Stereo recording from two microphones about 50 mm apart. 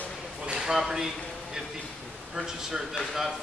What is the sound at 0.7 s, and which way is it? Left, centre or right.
Speech, centre.